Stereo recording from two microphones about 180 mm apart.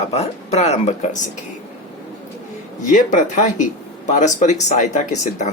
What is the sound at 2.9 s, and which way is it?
Speech, 45° left (ahead or behind).